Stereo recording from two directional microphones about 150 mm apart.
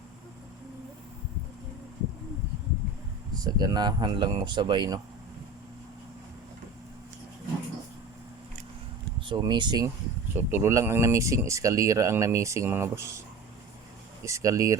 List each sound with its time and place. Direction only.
3.4 s speech: 25° right (ahead or behind)
9.2 s speech: 30° right (ahead or behind)
10.3 s speech: 15° right (ahead or behind)
14.3 s speech: 20° right (ahead or behind)